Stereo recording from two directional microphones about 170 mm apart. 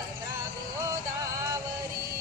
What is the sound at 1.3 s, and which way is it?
Music, 20° right (ahead or behind).